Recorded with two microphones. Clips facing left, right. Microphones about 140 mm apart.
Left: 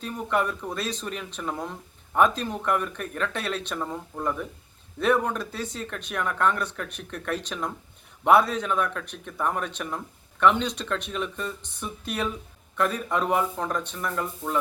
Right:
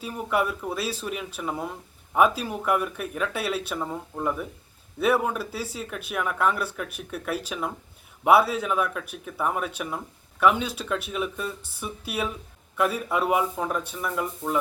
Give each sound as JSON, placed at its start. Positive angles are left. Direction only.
{"t": 0.0, "sound": "speech", "side_deg": -5}